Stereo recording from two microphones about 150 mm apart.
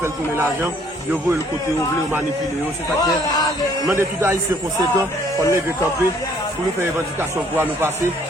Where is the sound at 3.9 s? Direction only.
15° right (ahead or behind).